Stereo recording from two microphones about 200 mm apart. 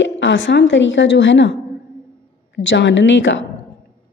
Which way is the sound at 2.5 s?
65° left (ahead or behind).